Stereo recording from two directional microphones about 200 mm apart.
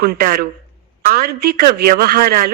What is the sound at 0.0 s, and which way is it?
A woman's voice, 45° right (ahead or behind).